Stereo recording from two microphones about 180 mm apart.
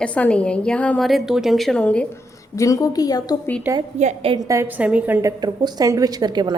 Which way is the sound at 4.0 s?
40° right (ahead or behind).